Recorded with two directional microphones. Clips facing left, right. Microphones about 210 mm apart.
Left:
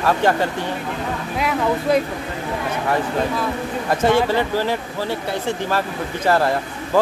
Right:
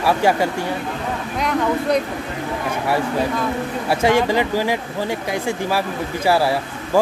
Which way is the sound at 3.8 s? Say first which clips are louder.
Even; 10° right (ahead or behind).